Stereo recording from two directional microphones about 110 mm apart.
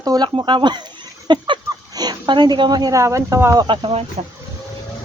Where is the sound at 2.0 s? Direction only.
40° right (ahead or behind); by 3.5 s 25° right (ahead or behind).